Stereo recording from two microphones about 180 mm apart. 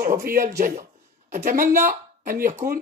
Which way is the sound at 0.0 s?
50° right (ahead or behind).